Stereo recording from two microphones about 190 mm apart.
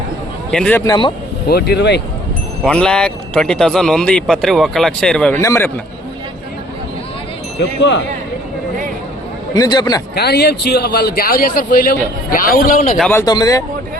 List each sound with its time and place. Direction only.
0.5 s speech: 5° left (ahead or behind)
0.9 s speech: 25° left (ahead or behind)
1.5 s speech: 60° left (ahead or behind)
2.6 s a man's voice: 5° left (ahead or behind)
7.6 s speech: 70° left (ahead or behind)
9.6 s speech: 20° left (ahead or behind)
10.2 s a man's voice: 60° left (ahead or behind)
13.1 s speech: 15° left (ahead or behind)